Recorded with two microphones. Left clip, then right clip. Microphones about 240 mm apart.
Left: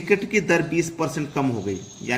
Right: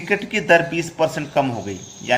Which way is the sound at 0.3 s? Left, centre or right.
Centre.